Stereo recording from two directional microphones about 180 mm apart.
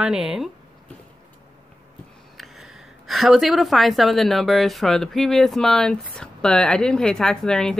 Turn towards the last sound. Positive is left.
turn(degrees=5)  # may be behind; listen again after turning